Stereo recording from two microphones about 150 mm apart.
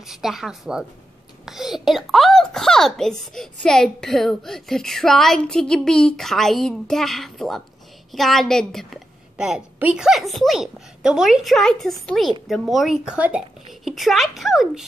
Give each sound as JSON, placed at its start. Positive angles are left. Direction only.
{"t": 0.0, "sound": "a woman's voice", "side_deg": -5}